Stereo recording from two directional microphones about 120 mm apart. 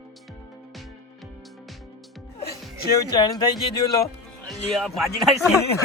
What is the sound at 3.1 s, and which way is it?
Speech, 35° left (ahead or behind).